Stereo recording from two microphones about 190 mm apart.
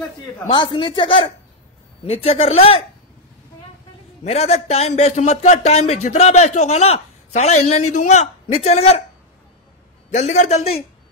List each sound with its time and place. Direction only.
0.5 s speech: 25° left (ahead or behind)
4.2 s a man's voice: 35° left (ahead or behind)
10.1 s a man's voice: 40° left (ahead or behind)